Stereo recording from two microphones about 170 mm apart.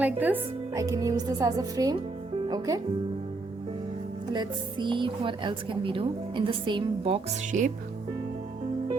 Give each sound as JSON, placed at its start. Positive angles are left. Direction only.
{"t": 0.0, "sound": "speech", "side_deg": -10}
{"t": 4.3, "sound": "speech", "side_deg": -25}